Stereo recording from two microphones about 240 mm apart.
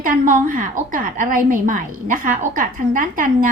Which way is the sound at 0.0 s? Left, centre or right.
Right.